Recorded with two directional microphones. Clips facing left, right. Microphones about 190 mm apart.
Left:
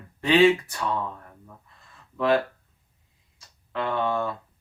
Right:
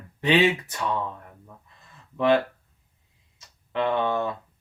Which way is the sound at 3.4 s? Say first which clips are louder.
Right 4 dB; 20° right (ahead or behind).